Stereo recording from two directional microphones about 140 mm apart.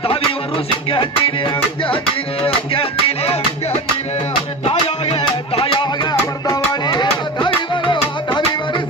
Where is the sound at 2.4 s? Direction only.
40° left (ahead or behind).